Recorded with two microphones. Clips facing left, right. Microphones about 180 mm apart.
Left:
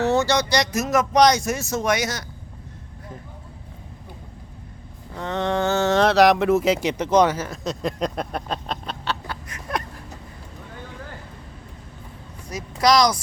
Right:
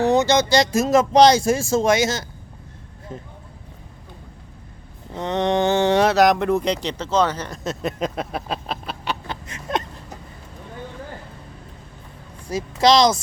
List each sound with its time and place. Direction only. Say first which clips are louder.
0.0 s speech: right 3 dB; 15° right (ahead or behind)
5.1 s speech: right 3 dB; 20° right (ahead or behind)
6.1 s speech: left 1 dB; centre (ahead or behind)
9.2 s a sound: right 2 dB; 20° right (ahead or behind)
12.5 s speech: right 3 dB; 25° right (ahead or behind)